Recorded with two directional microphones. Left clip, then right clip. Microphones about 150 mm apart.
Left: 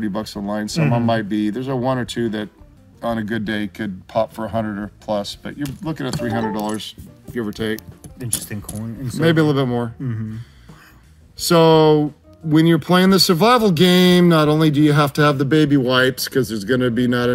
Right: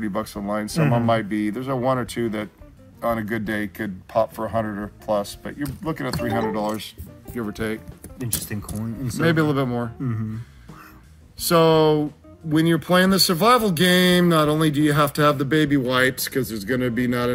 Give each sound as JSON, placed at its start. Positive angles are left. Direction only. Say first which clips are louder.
{"t": 0.0, "sound": "speech", "louder": "left 1 dB", "side_deg": 30}
{"t": 0.7, "sound": "speech", "louder": "left 1 dB", "side_deg": 5}
{"t": 1.0, "sound": "speech", "louder": "left 2 dB", "side_deg": 30}
{"t": 7.3, "sound": "speech", "louder": "left 4 dB", "side_deg": 25}
{"t": 8.5, "sound": "speech", "louder": "even", "side_deg": 5}
{"t": 9.2, "sound": "speech", "louder": "left 4 dB", "side_deg": 35}
{"t": 11.4, "sound": "speech", "louder": "left 4 dB", "side_deg": 45}